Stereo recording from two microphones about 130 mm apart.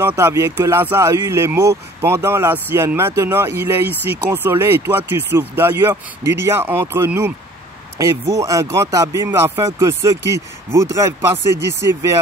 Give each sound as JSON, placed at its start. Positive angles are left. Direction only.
{"t": 0.0, "sound": "speech", "side_deg": -20}